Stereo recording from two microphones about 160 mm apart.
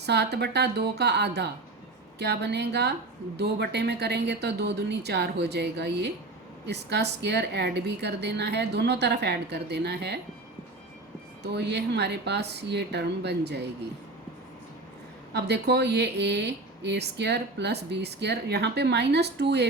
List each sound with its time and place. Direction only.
0.0 s speech: 90° right
11.4 s speech: 90° right
15.3 s speech: 90° right